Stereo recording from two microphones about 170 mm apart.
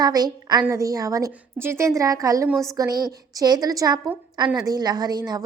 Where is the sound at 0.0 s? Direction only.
25° right (ahead or behind).